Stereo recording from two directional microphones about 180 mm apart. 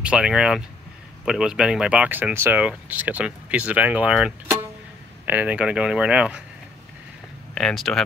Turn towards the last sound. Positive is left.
turn(degrees=0)  # may be behind; listen again after turning